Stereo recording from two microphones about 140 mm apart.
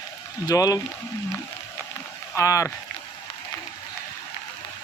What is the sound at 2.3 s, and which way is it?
Speech, 20° left (ahead or behind).